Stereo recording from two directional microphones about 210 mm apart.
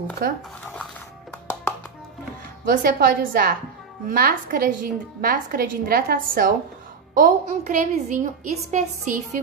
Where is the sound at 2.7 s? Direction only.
40° right (ahead or behind).